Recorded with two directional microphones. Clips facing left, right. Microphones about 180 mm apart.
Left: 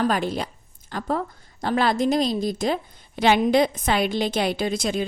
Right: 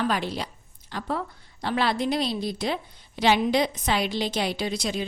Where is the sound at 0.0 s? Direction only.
45° left (ahead or behind).